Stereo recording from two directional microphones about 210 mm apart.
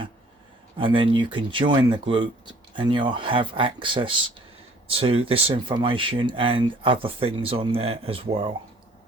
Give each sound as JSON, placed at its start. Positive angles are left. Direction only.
{"t": 0.8, "sound": "speech", "side_deg": -25}